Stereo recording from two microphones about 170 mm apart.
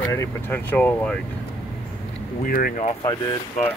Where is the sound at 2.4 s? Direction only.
60° left (ahead or behind).